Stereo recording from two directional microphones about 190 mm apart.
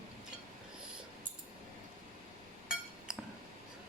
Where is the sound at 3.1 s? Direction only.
5° right (ahead or behind).